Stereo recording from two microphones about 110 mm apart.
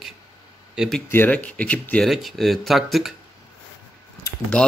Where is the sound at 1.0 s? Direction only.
15° left (ahead or behind).